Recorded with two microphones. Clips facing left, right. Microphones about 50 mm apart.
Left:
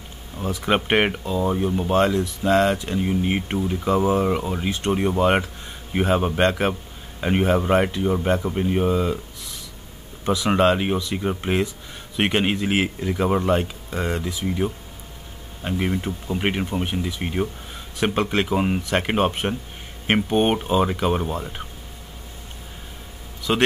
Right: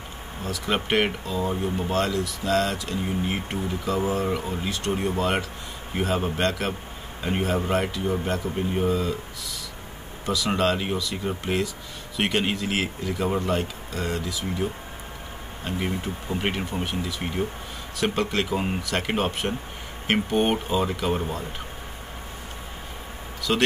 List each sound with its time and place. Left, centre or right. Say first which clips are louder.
0.4 s speech: left 5 dB; left
23.5 s speech: left 2 dB; left